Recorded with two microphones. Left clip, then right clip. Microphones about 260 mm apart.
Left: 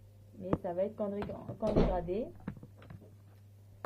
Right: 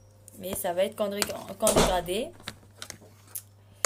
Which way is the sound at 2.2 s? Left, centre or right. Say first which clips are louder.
Right 6 dB; right.